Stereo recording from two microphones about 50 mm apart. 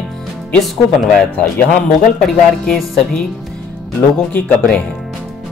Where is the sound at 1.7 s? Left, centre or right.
Centre.